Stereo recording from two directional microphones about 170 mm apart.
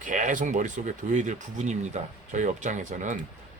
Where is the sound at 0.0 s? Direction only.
50° right (ahead or behind).